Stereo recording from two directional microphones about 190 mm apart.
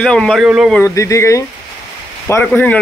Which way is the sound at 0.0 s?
5° left (ahead or behind).